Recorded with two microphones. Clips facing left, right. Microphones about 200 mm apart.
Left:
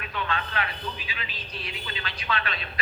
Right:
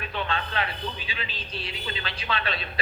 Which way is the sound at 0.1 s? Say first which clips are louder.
Even; 30° right (ahead or behind).